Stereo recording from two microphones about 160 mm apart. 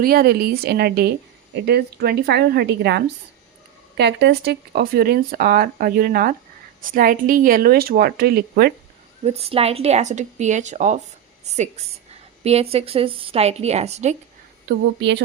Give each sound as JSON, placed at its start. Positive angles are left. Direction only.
{"t": 0.0, "sound": "a woman's voice", "side_deg": -70}
{"t": 9.2, "sound": "a woman's voice", "side_deg": -40}
{"t": 14.7, "sound": "a woman's voice", "side_deg": -90}